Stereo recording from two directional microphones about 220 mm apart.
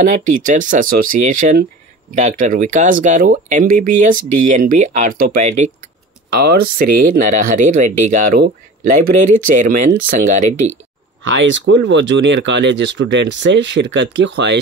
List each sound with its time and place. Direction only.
0.0 s speech: 35° right (ahead or behind)
6.3 s speech: 45° right (ahead or behind)
11.2 s speech: 60° right (ahead or behind)